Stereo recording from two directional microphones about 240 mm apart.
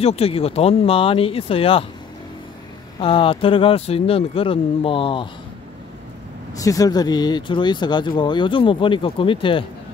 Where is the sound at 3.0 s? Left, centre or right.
Left.